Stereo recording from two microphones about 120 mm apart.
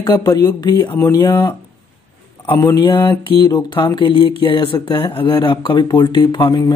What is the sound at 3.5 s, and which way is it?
Speech, 40° left (ahead or behind).